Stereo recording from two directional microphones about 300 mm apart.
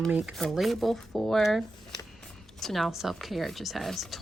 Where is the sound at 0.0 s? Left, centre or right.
Centre.